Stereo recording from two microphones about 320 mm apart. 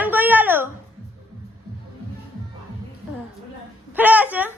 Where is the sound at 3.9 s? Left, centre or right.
Centre.